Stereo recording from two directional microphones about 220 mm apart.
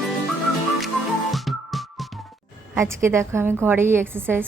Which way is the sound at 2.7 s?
10° right (ahead or behind).